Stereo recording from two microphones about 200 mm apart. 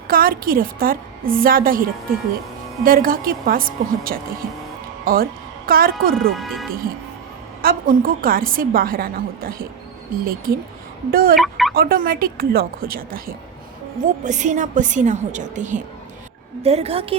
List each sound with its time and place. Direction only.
0.1 s a woman's voice: 45° right (ahead or behind)
6.3 s speech: centre (ahead or behind)
7.6 s a woman's voice: 45° right (ahead or behind)
11.3 s speech: centre (ahead or behind)
11.7 s a woman's voice: 45° right (ahead or behind); by 17.2 s 30° right (ahead or behind)